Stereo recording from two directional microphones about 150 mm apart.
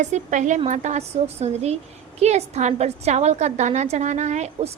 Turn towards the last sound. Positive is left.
turn(degrees=-50)  # may be behind; listen again after turning